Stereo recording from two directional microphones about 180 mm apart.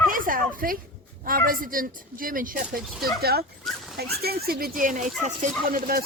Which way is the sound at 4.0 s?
60° right (ahead or behind).